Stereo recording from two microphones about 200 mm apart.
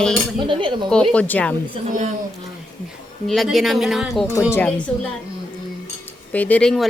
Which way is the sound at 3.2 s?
Centre (ahead or behind).